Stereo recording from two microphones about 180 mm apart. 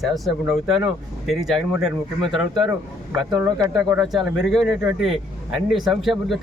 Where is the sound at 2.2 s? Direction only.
25° right (ahead or behind).